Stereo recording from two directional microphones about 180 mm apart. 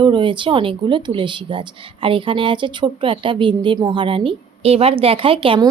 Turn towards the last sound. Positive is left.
turn(degrees=-30)  # may be behind; listen again after turning